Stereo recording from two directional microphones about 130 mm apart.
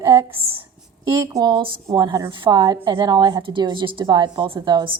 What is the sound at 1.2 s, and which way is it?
A woman's voice, 25° right (ahead or behind).